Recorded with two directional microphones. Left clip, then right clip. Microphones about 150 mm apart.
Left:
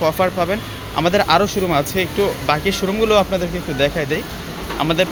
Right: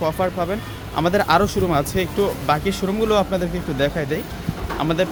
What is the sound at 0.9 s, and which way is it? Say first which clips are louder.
Speech: left 2 dB; 15° right (ahead or behind).